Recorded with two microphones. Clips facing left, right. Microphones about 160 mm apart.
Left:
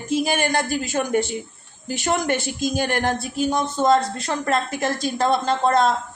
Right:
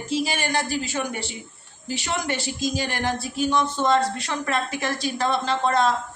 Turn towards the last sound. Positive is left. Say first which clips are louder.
# left 3 dB
turn(degrees=45)  # may be behind; listen again after turning